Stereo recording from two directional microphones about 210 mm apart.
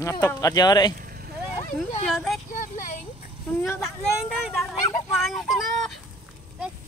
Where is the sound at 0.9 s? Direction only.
45° right (ahead or behind).